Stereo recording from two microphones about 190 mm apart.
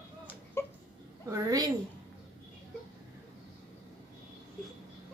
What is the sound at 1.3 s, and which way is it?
Speech, 20° right (ahead or behind).